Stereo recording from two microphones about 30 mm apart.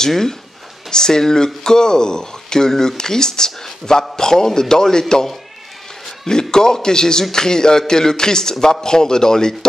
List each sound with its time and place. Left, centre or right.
0.8 s speech: left
6.5 s speech: left